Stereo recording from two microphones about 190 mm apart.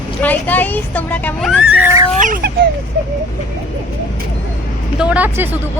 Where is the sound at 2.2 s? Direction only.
45° right (ahead or behind).